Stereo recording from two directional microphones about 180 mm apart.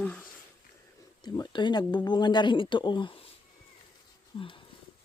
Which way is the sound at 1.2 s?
25° left (ahead or behind).